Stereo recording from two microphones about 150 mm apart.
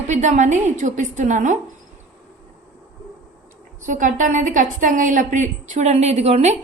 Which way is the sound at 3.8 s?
60° right (ahead or behind).